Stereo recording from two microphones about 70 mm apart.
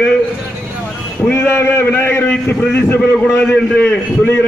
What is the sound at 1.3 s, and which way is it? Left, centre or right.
A man's voice, left.